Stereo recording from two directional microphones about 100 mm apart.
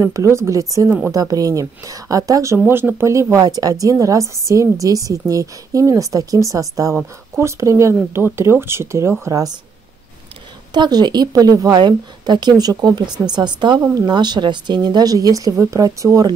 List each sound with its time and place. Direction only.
0.0 s a woman's voice: 30° right (ahead or behind)
2.6 s speech: 20° right (ahead or behind)
3.4 s a woman's voice: 40° right (ahead or behind)
10.7 s a woman's voice: 45° right (ahead or behind)